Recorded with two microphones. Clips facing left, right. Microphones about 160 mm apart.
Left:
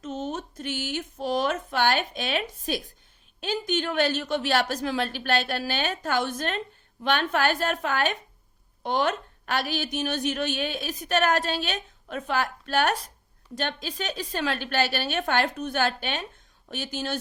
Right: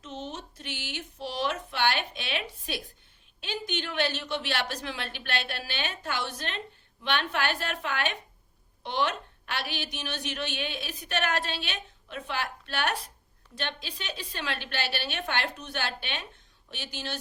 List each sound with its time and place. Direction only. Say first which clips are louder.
0.0 s a woman's voice: left 7 dB; 45° left (ahead or behind)